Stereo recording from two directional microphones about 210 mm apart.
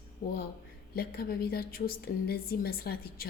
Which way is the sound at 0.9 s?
45° left (ahead or behind).